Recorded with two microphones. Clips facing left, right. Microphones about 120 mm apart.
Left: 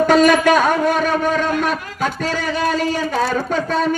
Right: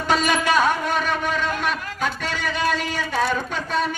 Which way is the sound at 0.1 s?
45° left (ahead or behind).